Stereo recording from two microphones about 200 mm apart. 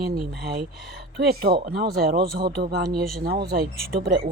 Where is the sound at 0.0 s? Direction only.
50° right (ahead or behind).